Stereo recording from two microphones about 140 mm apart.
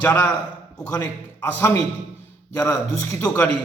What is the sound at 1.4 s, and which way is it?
A man's voice, 20° left (ahead or behind).